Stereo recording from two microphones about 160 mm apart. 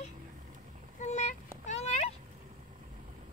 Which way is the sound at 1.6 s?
40° left (ahead or behind).